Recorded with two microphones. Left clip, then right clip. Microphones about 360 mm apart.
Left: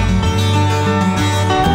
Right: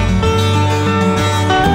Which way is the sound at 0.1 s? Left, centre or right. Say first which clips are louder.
Right 3 dB; centre.